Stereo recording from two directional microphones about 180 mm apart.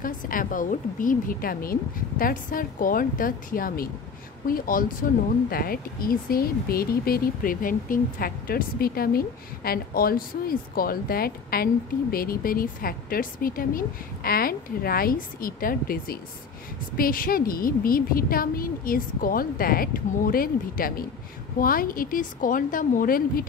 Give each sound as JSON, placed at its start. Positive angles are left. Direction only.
{"t": 0.0, "sound": "a woman's voice", "side_deg": 50}